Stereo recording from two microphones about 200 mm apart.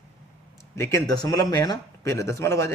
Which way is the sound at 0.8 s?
15° left (ahead or behind).